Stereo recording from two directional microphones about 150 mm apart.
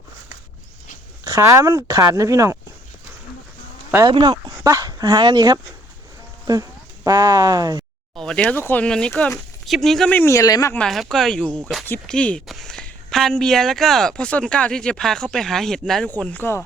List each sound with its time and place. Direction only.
1.2 s speech: 20° right (ahead or behind)
4.1 s speech: 30° right (ahead or behind)
8.1 s speech: 5° left (ahead or behind); by 10.8 s 20° left (ahead or behind)
10.8 s speech: centre (ahead or behind)